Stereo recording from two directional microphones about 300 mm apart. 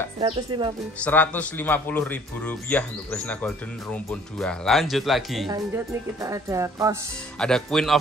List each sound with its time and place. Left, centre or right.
0.2 s a woman's voice: centre
1.0 s a man's voice: centre
5.5 s a woman's voice: centre
7.3 s a man's voice: centre